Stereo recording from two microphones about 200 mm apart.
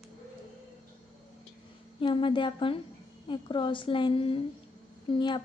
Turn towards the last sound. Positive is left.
turn(degrees=25)  # may be behind; listen again after turning